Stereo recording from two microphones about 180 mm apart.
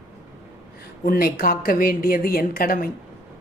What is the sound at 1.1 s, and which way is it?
A woman's voice, 55° left (ahead or behind).